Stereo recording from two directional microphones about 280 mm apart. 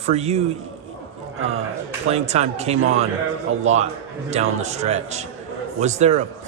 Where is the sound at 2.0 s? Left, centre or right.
Right.